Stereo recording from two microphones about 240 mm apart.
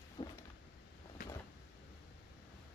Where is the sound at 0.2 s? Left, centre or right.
Centre.